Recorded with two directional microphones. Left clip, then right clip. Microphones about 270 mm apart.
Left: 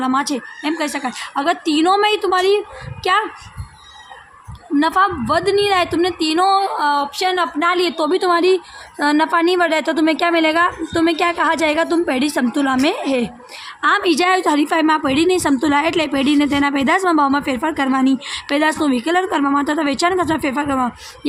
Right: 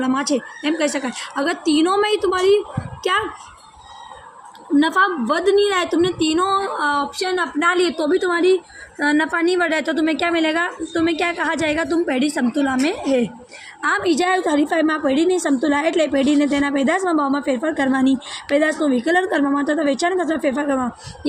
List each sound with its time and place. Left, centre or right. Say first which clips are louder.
0.0 s a woman's voice: left 2 dB; centre
4.8 s a woman's voice: left 2 dB; centre